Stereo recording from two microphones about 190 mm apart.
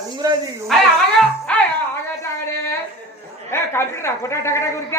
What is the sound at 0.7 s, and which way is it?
Speech, centre (ahead or behind).